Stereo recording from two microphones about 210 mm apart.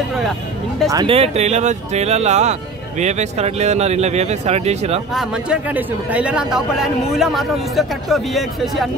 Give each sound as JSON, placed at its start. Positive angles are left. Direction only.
{"t": 0.8, "sound": "speech", "side_deg": -15}
{"t": 1.1, "sound": "speech", "side_deg": -30}
{"t": 5.1, "sound": "a man's voice", "side_deg": 0}